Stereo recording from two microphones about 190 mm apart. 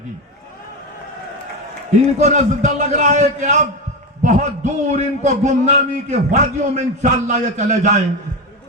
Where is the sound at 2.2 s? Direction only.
40° right (ahead or behind).